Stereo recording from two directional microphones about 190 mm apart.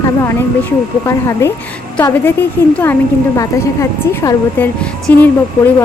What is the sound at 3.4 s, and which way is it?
Speech, 15° left (ahead or behind).